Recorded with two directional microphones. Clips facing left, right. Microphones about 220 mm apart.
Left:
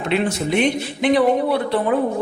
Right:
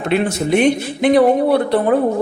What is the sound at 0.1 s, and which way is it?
A man's voice, 50° right (ahead or behind).